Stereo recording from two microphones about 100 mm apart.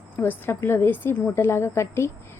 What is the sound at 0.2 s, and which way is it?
A woman's voice, 20° left (ahead or behind).